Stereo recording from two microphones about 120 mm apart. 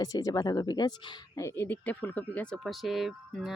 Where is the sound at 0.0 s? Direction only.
30° left (ahead or behind).